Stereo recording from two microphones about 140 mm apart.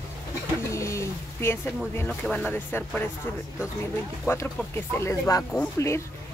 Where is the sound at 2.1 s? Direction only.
5° left (ahead or behind).